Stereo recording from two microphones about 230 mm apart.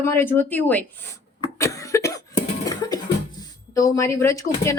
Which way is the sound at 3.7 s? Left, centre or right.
Centre.